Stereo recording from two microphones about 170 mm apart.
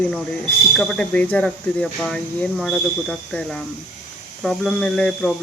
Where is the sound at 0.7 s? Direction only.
Centre (ahead or behind).